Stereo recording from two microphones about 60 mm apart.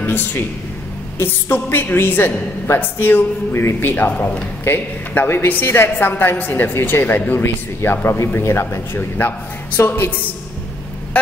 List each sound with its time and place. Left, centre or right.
0.0 s a woman's voice: left
9.8 s a woman's voice: left